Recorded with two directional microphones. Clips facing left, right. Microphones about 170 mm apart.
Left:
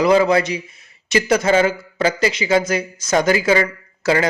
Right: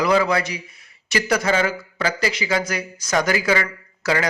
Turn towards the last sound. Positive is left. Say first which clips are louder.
# left 4 dB
turn(degrees=25)  # may be behind; listen again after turning